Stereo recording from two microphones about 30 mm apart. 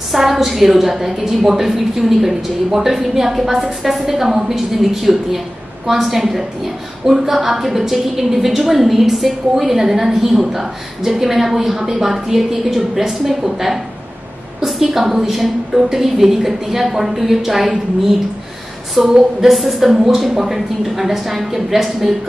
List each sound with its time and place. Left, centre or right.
0.1 s a woman's voice: centre
14.6 s a woman's voice: centre
19.5 s a woman's voice: centre